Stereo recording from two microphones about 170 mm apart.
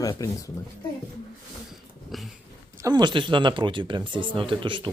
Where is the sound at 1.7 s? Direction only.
Centre (ahead or behind).